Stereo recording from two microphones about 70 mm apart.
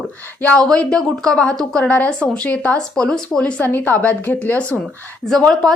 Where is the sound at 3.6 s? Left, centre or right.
Left.